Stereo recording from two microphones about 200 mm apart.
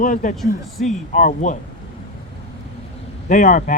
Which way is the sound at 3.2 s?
40° left (ahead or behind).